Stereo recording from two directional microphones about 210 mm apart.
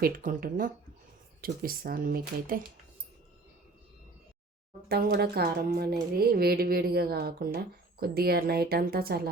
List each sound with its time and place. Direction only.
0.0 s speech: 40° right (ahead or behind)
4.9 s speech: 50° right (ahead or behind)